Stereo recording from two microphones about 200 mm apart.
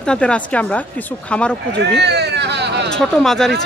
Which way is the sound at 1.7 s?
55° right (ahead or behind).